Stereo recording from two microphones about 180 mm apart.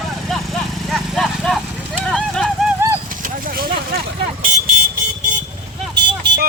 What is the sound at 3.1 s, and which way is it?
Vehicle, 50° right (ahead or behind).